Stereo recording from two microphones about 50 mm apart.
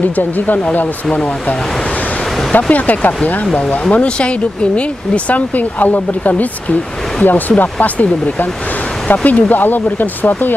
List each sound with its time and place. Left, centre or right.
2.5 s speech: left